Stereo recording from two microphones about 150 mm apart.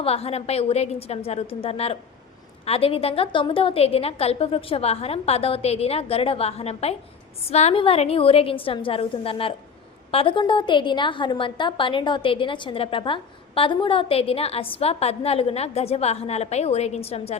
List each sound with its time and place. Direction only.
0.0 s a woman's voice: 40° left (ahead or behind)